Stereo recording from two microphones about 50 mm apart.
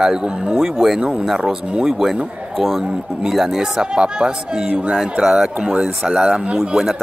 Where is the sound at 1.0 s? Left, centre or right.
Centre.